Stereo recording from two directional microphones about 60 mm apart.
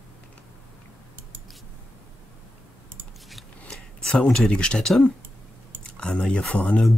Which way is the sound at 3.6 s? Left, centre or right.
Centre.